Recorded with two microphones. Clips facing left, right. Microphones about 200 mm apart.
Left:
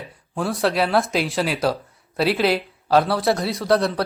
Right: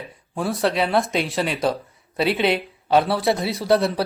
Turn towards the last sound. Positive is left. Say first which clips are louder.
# even
turn(degrees=0)  # may be behind; listen again after turning